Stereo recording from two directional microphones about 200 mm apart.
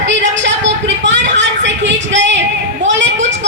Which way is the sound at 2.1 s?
65° right (ahead or behind).